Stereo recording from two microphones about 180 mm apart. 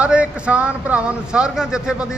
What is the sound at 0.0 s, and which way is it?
A man's voice, 5° right (ahead or behind).